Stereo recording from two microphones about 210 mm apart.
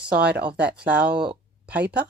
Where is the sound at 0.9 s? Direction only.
5° right (ahead or behind).